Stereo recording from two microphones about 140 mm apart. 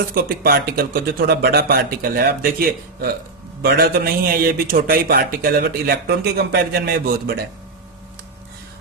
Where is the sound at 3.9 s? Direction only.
90° right.